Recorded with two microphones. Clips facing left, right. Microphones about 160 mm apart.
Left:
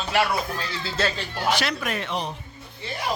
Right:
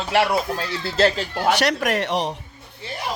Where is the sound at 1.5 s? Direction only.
70° right (ahead or behind).